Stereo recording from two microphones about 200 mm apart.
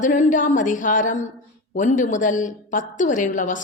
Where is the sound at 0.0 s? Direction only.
40° left (ahead or behind).